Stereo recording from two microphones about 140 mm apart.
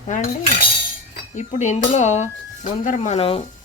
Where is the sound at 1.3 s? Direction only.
60° left (ahead or behind).